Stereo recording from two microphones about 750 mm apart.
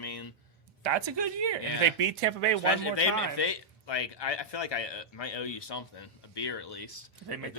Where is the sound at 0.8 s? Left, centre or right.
Right.